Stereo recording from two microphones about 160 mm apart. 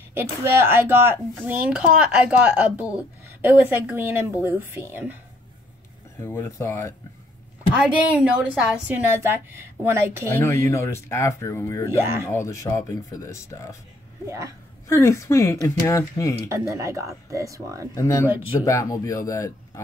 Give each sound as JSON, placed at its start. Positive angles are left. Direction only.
{"t": 0.1, "sound": "speech", "side_deg": -15}
{"t": 6.2, "sound": "speech", "side_deg": 15}
{"t": 8.1, "sound": "speech", "side_deg": -5}
{"t": 10.3, "sound": "speech", "side_deg": 15}
{"t": 12.0, "sound": "speech", "side_deg": -15}
{"t": 12.3, "sound": "speech", "side_deg": 20}
{"t": 14.2, "sound": "speech", "side_deg": -20}
{"t": 14.9, "sound": "speech", "side_deg": 20}
{"t": 16.4, "sound": "speech", "side_deg": -20}
{"t": 17.9, "sound": "speech", "side_deg": 20}